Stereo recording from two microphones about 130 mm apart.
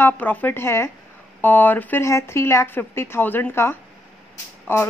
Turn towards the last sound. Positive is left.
turn(degrees=15)  # may be behind; listen again after turning